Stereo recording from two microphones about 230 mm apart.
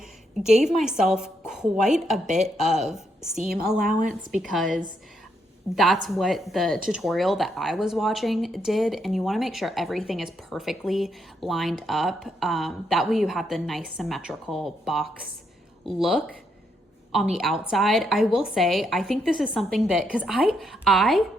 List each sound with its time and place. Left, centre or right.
0.5 s speech: centre
4.3 s speech: centre